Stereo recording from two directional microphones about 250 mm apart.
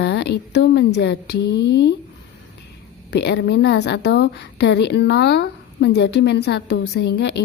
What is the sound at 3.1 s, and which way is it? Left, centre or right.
A woman's voice, left.